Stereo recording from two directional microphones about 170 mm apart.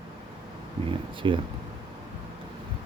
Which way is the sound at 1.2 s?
30° right (ahead or behind).